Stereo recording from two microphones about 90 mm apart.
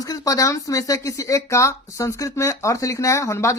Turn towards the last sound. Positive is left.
turn(degrees=35)  # may be behind; listen again after turning